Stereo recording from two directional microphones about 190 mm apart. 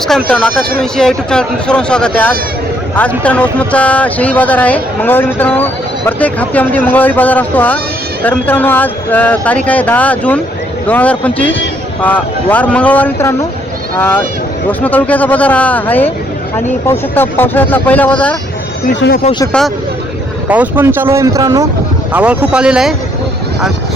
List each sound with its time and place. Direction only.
0.8 s speech: 5° left (ahead or behind)
14.7 s speech: 10° left (ahead or behind)
18.9 s speech: 55° left (ahead or behind)
19.5 s speech: 5° left (ahead or behind)
20.5 s speech: 10° right (ahead or behind)
22.1 s speech: 5° right (ahead or behind)